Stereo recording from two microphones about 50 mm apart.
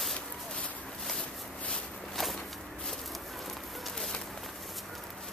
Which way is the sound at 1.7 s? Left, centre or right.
Centre.